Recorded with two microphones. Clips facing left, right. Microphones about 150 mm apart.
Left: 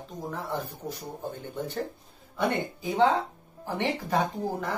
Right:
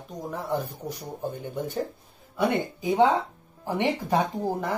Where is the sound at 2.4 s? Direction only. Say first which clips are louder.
Right 3 dB; 15° right (ahead or behind).